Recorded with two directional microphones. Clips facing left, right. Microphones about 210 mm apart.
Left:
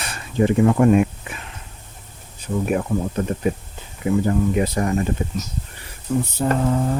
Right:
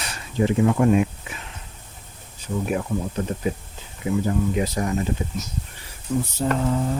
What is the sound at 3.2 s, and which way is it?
Speech, 55° left (ahead or behind).